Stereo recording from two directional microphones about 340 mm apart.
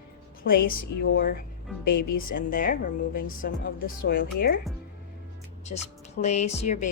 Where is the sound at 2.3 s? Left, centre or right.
Left.